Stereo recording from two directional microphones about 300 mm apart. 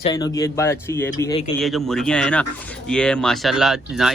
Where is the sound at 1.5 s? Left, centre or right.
Centre.